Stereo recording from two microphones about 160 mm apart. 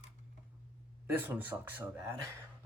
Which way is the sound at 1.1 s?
15° right (ahead or behind).